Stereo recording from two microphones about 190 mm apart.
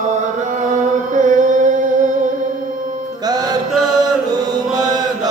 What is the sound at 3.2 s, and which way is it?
Music, 20° right (ahead or behind).